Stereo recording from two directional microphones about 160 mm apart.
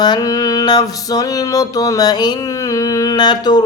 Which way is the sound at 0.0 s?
25° left (ahead or behind).